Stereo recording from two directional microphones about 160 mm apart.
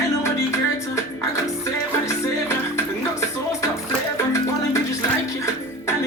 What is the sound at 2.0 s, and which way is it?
Music, 15° left (ahead or behind).